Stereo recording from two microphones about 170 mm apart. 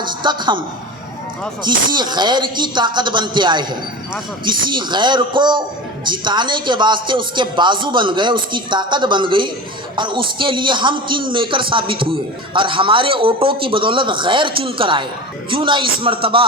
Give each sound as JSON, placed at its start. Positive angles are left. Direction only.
{"t": 0.0, "sound": "a woman's voice", "side_deg": -25}
{"t": 1.6, "sound": "speech", "side_deg": -25}